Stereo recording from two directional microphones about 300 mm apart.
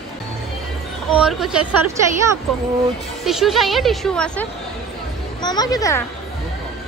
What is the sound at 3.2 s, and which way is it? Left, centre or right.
A woman's voice, centre.